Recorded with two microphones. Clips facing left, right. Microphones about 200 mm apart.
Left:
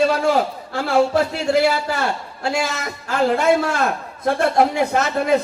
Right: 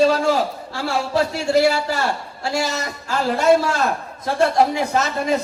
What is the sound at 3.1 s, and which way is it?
A man's voice, 55° left (ahead or behind).